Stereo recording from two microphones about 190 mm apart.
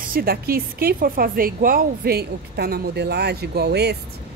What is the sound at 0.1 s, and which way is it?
A woman's voice, 50° right (ahead or behind).